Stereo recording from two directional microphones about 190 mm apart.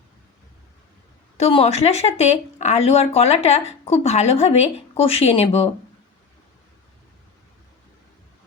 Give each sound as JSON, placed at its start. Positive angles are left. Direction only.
{"t": 1.4, "sound": "speech", "side_deg": 30}